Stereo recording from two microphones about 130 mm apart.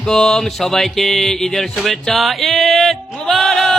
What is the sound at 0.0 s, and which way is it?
Speech, 5° left (ahead or behind).